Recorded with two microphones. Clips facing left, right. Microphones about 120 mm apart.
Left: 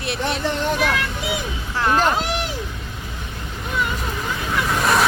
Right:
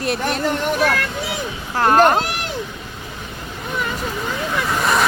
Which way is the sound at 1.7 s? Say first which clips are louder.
Right 5 dB; 45° right (ahead or behind).